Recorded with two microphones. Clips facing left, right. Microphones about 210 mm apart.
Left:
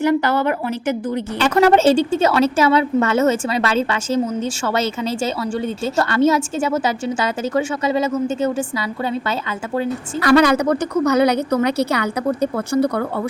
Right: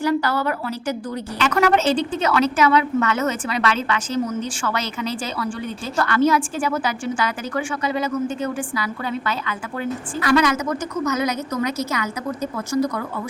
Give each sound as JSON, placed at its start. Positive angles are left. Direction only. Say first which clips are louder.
{"t": 0.0, "sound": "a woman's voice", "louder": "left 4 dB", "side_deg": 20}
{"t": 11.5, "sound": "speech", "louder": "left 6 dB", "side_deg": 65}
{"t": 11.9, "sound": "a woman's voice", "louder": "left 5 dB", "side_deg": 35}
{"t": 12.4, "sound": "speech", "louder": "left 2 dB", "side_deg": 60}